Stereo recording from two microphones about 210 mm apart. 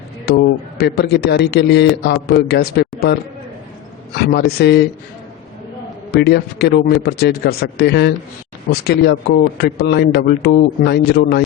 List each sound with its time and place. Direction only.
0.3 s speech: 50° left (ahead or behind)
4.1 s speech: 50° left (ahead or behind)
6.1 s speech: 50° left (ahead or behind)